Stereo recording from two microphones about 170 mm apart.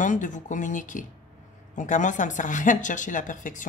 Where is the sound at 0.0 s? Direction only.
50° left (ahead or behind).